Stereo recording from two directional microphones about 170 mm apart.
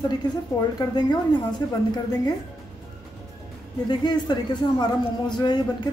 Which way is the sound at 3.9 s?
25° left (ahead or behind).